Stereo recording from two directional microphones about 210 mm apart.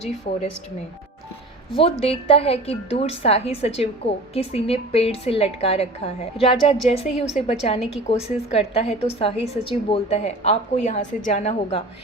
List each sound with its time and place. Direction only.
1.7 s a woman's voice: 25° left (ahead or behind)